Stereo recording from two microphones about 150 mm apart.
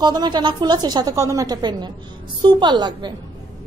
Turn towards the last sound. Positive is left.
turn(degrees=-30)  # may be behind; listen again after turning